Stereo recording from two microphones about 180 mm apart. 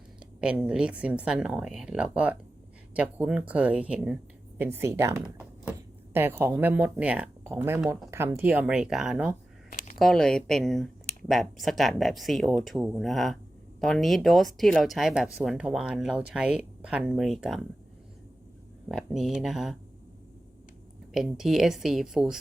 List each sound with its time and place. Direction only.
0.4 s speech: 5° right (ahead or behind)
9.6 s a sound: 50° left (ahead or behind)
10.0 s speech: centre (ahead or behind)
18.9 s speech: centre (ahead or behind)
21.1 s speech: centre (ahead or behind)